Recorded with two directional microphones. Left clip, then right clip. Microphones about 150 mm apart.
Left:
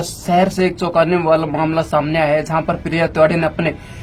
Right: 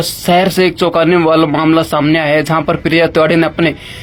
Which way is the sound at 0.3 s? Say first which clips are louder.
Right 4 dB; 35° right (ahead or behind).